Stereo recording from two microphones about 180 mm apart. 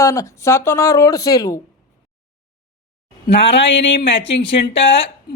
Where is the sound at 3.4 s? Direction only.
90° left.